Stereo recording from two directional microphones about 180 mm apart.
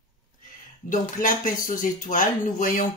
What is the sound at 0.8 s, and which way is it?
Speech, 45° left (ahead or behind).